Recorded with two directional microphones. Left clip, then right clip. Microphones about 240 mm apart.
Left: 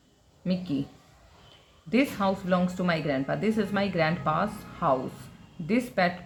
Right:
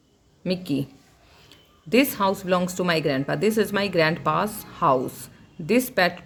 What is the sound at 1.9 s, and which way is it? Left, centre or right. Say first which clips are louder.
Speech: right 5 dB; right.